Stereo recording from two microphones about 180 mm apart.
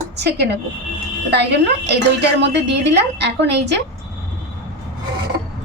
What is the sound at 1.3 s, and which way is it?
A woman's voice, 70° right (ahead or behind).